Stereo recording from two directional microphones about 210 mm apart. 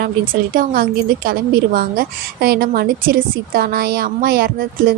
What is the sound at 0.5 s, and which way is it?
A woman's voice, 45° right (ahead or behind).